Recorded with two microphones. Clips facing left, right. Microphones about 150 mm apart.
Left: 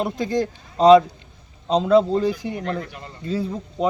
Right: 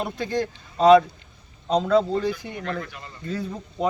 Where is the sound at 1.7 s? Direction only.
30° left (ahead or behind).